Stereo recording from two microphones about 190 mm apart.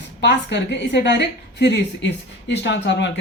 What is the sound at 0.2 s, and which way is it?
Speech, 65° left (ahead or behind).